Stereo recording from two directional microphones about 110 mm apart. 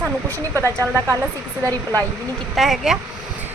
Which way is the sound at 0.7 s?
30° right (ahead or behind).